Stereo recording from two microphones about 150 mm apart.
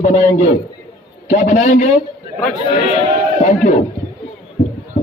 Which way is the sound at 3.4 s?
55° left (ahead or behind).